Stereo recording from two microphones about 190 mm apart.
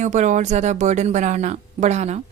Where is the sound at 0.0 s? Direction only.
40° right (ahead or behind).